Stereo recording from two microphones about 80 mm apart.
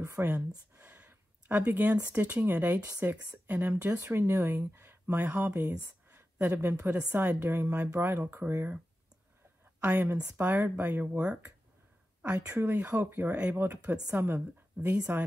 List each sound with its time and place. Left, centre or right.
0.0 s speech: right
3.4 s a woman's voice: centre
7.6 s speech: centre
7.9 s speech: right
12.7 s speech: centre